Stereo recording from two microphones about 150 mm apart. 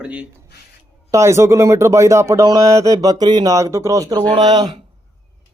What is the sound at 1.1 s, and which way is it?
A man's voice, 20° right (ahead or behind).